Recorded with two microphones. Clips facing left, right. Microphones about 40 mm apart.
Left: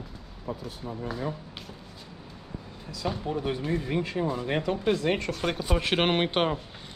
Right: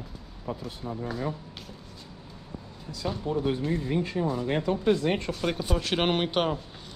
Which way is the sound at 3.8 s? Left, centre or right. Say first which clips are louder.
Right 1 dB; left.